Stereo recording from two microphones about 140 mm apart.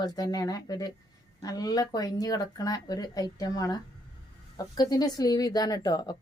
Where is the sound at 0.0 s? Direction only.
30° left (ahead or behind).